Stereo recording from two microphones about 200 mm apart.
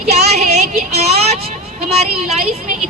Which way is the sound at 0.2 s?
35° right (ahead or behind).